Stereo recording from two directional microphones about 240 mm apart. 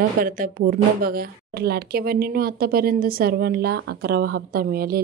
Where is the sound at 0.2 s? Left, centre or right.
Right.